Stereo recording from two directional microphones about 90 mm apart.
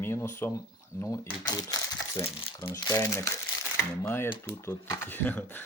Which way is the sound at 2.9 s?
35° left (ahead or behind).